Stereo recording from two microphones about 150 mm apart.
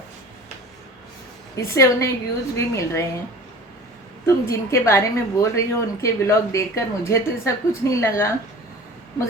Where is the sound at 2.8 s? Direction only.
20° left (ahead or behind).